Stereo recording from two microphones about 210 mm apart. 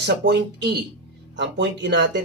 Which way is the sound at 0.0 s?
55° right (ahead or behind).